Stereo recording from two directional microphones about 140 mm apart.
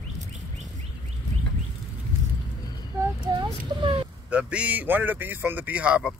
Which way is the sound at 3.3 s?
40° right (ahead or behind).